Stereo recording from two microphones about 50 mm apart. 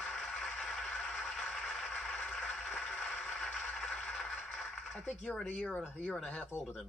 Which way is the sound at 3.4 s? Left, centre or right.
Centre.